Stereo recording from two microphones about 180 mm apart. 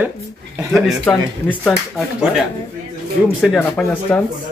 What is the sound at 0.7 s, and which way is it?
Speech, 5° left (ahead or behind).